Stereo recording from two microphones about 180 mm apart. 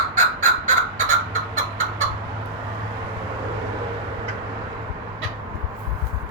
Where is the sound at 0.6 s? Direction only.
45° right (ahead or behind).